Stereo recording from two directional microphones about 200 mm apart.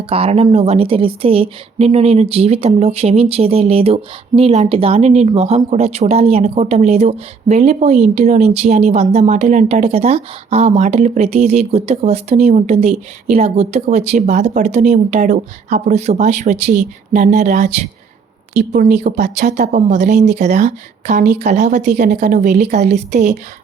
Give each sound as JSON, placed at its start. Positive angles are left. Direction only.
{"t": 0.1, "sound": "a woman's voice", "side_deg": -30}